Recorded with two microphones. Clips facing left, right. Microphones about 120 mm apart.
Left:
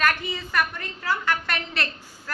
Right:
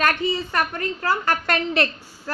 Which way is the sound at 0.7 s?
55° right (ahead or behind).